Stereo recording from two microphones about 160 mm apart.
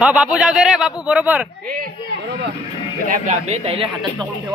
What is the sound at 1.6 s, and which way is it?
Speech, 65° right (ahead or behind).